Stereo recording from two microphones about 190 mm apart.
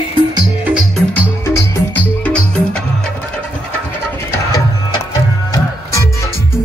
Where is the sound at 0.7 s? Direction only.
5° right (ahead or behind).